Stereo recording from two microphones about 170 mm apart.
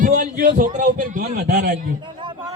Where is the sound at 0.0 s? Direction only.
55° right (ahead or behind).